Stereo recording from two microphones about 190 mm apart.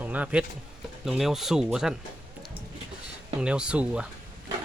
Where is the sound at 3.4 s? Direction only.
5° right (ahead or behind).